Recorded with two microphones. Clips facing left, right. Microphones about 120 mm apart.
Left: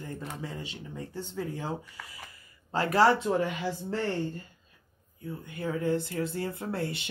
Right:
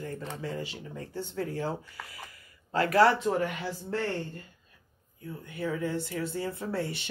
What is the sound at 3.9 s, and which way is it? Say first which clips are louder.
Speech: right 1 dB; 20° left (ahead or behind).